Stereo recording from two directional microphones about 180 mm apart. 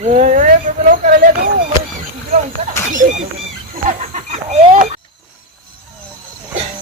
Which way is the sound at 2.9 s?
45° right (ahead or behind).